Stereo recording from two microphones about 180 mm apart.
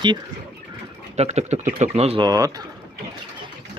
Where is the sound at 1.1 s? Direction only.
40° right (ahead or behind).